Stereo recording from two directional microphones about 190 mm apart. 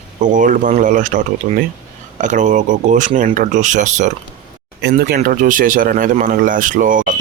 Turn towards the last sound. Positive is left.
turn(degrees=-45)  # may be behind; listen again after turning